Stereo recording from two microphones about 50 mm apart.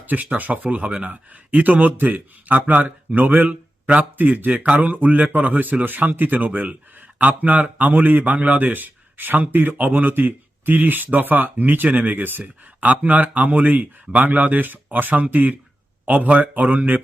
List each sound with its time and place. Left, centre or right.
0.0 s a man's voice: right